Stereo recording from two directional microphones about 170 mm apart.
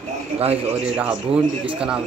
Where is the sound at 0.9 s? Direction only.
5° right (ahead or behind).